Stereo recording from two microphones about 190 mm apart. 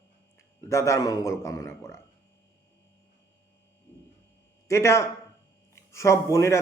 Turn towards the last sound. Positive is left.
turn(degrees=15)  # may be behind; listen again after turning